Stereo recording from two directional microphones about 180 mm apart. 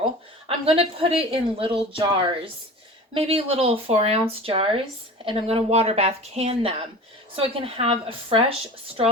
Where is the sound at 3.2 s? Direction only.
35° right (ahead or behind).